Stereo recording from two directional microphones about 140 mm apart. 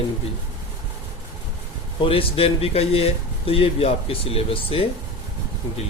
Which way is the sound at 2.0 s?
40° left (ahead or behind).